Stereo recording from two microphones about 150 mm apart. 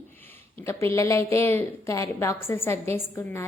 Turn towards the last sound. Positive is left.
turn(degrees=15)  # may be behind; listen again after turning